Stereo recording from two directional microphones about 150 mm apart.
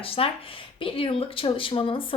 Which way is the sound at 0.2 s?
40° left (ahead or behind).